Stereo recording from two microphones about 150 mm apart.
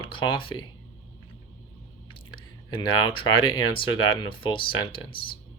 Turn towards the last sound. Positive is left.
turn(degrees=35)  # may be behind; listen again after turning